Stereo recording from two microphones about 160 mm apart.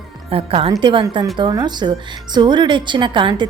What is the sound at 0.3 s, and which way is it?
A woman's voice, 35° right (ahead or behind).